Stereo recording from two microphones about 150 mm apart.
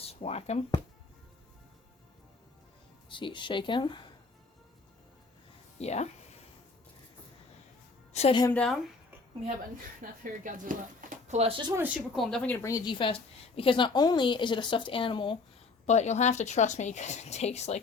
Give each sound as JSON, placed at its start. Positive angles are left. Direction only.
{"t": 0.1, "sound": "a woman's voice", "side_deg": 45}
{"t": 3.1, "sound": "a woman's voice", "side_deg": 35}
{"t": 5.8, "sound": "a woman's voice", "side_deg": 50}
{"t": 8.1, "sound": "a woman's voice", "side_deg": 45}
{"t": 8.5, "sound": "speech", "side_deg": 5}
{"t": 10.0, "sound": "speech", "side_deg": -65}
{"t": 11.3, "sound": "speech", "side_deg": -45}
{"t": 11.9, "sound": "speech", "side_deg": 0}
{"t": 12.6, "sound": "a woman's voice", "side_deg": 25}
{"t": 15.9, "sound": "a woman's voice", "side_deg": 50}